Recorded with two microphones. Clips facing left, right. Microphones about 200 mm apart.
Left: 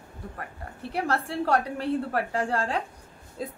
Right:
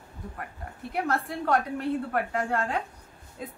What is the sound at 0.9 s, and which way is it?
A woman's voice, 30° left (ahead or behind).